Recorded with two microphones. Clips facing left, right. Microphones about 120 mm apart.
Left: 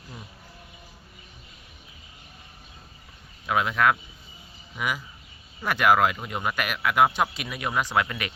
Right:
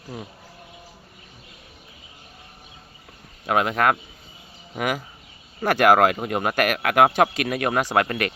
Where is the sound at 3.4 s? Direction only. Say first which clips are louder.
Right 3 dB; 55° right (ahead or behind).